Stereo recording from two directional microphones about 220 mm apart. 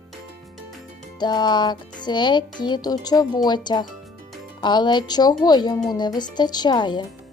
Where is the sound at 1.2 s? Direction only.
20° left (ahead or behind).